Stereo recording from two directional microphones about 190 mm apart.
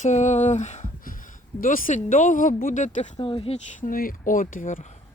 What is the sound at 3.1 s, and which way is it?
Speech, 25° left (ahead or behind).